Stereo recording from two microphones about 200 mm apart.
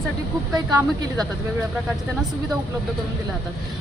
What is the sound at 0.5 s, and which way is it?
Speech, 20° right (ahead or behind).